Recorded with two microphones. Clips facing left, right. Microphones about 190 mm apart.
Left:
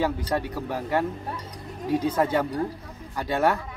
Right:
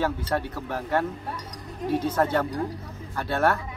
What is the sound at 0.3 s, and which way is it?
A man's voice, 15° left (ahead or behind).